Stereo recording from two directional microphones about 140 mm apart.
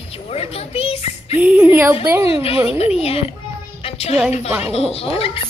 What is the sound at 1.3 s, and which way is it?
A child's voice, 10° right (ahead or behind).